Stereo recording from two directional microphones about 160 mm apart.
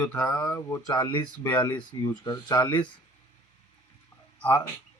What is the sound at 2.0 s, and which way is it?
Speech, 25° left (ahead or behind).